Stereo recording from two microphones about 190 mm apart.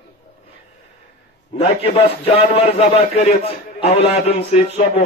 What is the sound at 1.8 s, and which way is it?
A man's voice, 30° left (ahead or behind).